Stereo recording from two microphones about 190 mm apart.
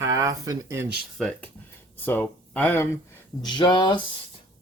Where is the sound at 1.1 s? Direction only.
5° left (ahead or behind).